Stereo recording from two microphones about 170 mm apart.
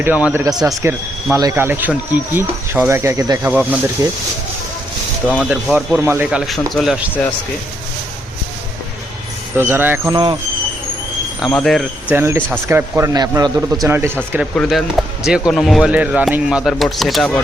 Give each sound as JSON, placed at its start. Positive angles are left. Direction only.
{"t": 0.0, "sound": "speech", "side_deg": -10}
{"t": 3.5, "sound": "speech", "side_deg": -5}
{"t": 4.0, "sound": "speech", "side_deg": -20}
{"t": 5.3, "sound": "speech", "side_deg": 0}
{"t": 6.4, "sound": "speech", "side_deg": 0}
{"t": 9.6, "sound": "speech", "side_deg": -10}
{"t": 11.3, "sound": "speech", "side_deg": 0}
{"t": 12.1, "sound": "speech", "side_deg": -15}
{"t": 14.5, "sound": "speech", "side_deg": 0}